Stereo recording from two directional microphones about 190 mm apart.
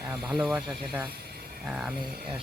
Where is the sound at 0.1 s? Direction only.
5° right (ahead or behind).